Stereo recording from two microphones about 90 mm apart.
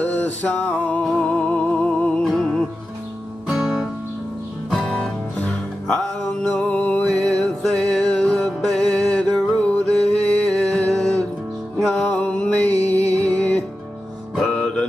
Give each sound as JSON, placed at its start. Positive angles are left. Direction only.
{"t": 0.0, "sound": "music", "side_deg": 20}
{"t": 5.0, "sound": "music", "side_deg": 10}
{"t": 12.1, "sound": "a sound", "side_deg": 15}
{"t": 13.2, "sound": "music", "side_deg": 15}